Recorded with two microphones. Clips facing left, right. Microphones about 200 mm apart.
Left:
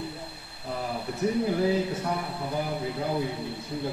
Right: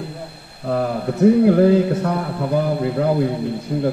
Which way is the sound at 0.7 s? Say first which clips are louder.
Right 11 dB; 75° right (ahead or behind).